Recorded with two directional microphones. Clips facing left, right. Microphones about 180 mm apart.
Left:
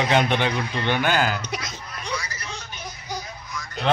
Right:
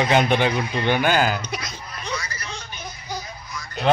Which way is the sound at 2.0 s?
15° left (ahead or behind).